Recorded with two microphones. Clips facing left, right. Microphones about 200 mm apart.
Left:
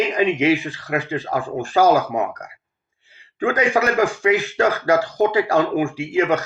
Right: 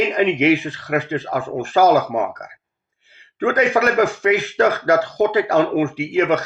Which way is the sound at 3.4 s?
60° right (ahead or behind).